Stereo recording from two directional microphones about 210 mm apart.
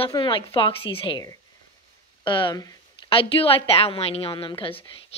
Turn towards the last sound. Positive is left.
turn(degrees=25)  # may be behind; listen again after turning